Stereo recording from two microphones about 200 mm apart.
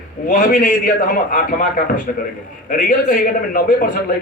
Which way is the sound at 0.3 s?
45° left (ahead or behind).